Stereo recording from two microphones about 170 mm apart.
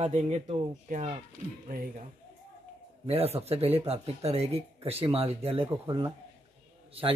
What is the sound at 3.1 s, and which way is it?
Speech, 35° right (ahead or behind).